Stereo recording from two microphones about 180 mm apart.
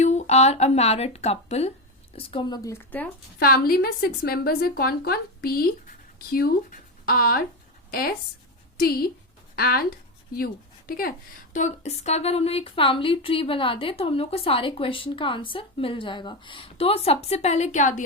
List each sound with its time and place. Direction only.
0.0 s a woman's voice: 40° left (ahead or behind); by 3.1 s 10° left (ahead or behind)
3.3 s a woman's voice: 55° left (ahead or behind)
11.5 s a woman's voice: 40° left (ahead or behind)